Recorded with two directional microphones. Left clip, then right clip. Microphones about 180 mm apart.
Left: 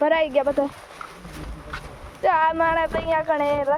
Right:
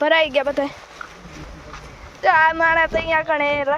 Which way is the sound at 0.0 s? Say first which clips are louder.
Right 3 dB; 5° right (ahead or behind).